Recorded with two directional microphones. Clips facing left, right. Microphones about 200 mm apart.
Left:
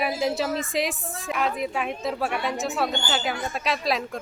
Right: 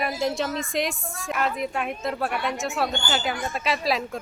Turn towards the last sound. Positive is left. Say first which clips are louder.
# right 1 dB
turn(degrees=0)  # may be behind; listen again after turning